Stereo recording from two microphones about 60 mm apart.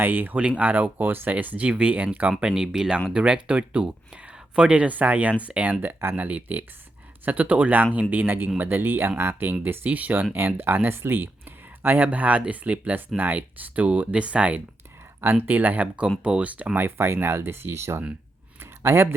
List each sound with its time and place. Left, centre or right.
0.0 s speech: right
2.4 s speech: centre
5.8 s speech: right
15.2 s speech: right
16.7 s speech: right
18.6 s a sound: right